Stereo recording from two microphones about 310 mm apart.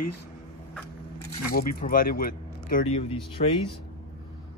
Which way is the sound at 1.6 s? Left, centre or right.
Left.